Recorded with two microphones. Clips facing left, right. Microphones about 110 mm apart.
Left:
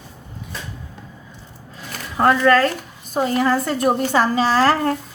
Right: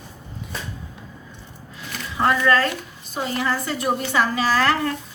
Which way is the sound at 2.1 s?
40° left (ahead or behind).